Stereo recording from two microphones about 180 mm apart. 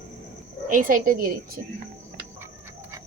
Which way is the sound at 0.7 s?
50° right (ahead or behind).